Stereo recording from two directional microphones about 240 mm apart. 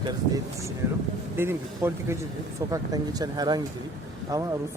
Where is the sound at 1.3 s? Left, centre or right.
Centre.